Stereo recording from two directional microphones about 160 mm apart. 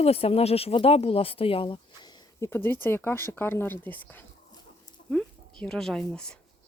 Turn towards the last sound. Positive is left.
turn(degrees=5)  # may be behind; listen again after turning